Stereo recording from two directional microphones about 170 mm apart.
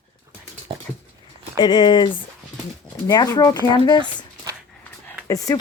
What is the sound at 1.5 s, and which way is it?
Speech, 25° left (ahead or behind).